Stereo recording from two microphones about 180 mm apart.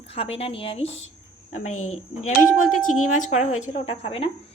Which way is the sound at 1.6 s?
40° left (ahead or behind).